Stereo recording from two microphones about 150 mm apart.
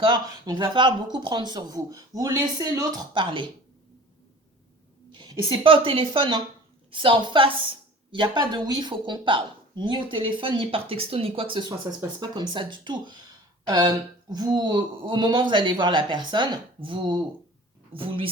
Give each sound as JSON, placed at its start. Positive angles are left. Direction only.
{"t": 0.0, "sound": "speech", "side_deg": -30}
{"t": 5.1, "sound": "a woman's voice", "side_deg": -30}
{"t": 11.5, "sound": "a woman's voice", "side_deg": -30}